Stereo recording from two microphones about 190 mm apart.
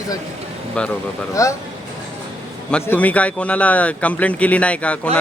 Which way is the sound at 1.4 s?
15° left (ahead or behind).